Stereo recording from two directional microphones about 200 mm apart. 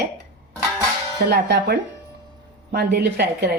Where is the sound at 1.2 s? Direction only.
55° right (ahead or behind).